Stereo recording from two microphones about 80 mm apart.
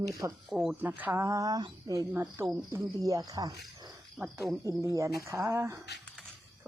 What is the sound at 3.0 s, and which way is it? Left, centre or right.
Speech, right.